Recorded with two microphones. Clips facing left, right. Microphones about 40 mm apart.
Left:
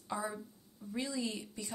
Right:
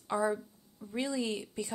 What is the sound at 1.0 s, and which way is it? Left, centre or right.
Speech, right.